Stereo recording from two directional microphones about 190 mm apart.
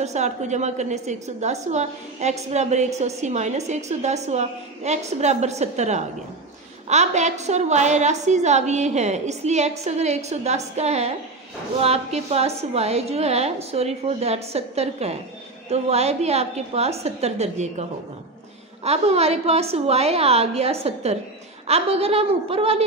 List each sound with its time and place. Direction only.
0.0 s a woman's voice: 35° right (ahead or behind)
18.9 s a woman's voice: 35° right (ahead or behind)